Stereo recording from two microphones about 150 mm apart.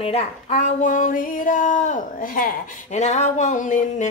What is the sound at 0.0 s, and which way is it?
Speech, 40° left (ahead or behind).